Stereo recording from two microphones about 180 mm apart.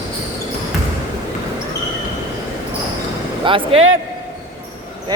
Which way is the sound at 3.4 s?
30° right (ahead or behind).